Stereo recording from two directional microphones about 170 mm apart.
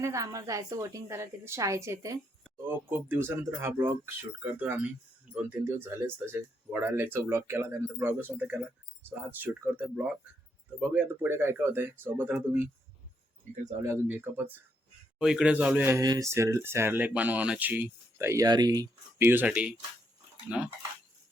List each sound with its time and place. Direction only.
0.0 s a woman's voice: 20° right (ahead or behind)
13.8 s speech: 10° right (ahead or behind)